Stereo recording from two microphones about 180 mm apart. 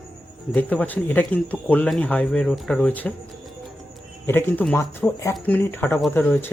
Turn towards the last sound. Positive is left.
turn(degrees=10)  # may be behind; listen again after turning